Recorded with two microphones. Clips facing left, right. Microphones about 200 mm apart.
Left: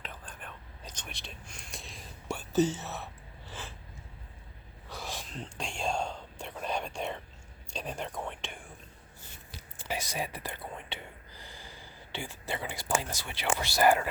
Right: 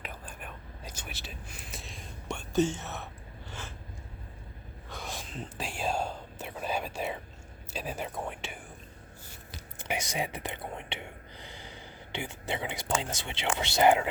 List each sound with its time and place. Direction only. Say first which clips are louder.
0.0 s whispering: right 2 dB; 10° right (ahead or behind)
2.7 s a sound: even; centre (ahead or behind)
4.9 s whispering: even; centre (ahead or behind)
7.7 s speech: right 1 dB; 5° right (ahead or behind)
9.7 s speech: right 2 dB; 20° right (ahead or behind)